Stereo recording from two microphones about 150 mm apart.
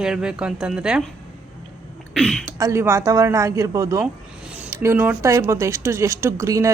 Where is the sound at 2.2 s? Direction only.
Centre (ahead or behind).